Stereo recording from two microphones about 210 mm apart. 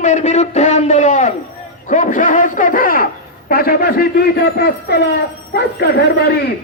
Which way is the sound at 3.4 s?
45° left (ahead or behind).